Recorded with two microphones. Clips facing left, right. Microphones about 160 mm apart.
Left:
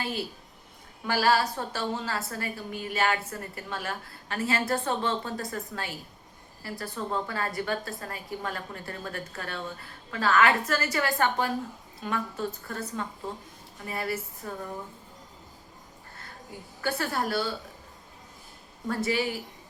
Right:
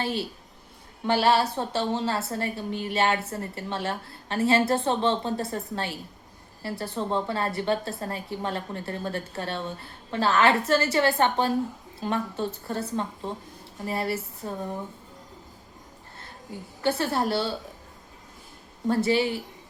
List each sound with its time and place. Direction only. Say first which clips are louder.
0.0 s a woman's voice: right 4 dB; 30° right (ahead or behind)
16.8 s a woman's voice: right 4 dB; 25° right (ahead or behind)
18.9 s a woman's voice: right 5 dB; 25° right (ahead or behind)